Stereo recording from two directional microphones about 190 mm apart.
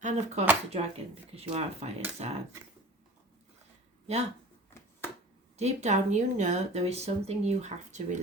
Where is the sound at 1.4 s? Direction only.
35° right (ahead or behind).